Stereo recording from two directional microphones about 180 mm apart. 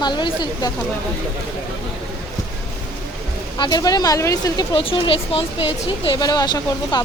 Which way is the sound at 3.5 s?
25° left (ahead or behind).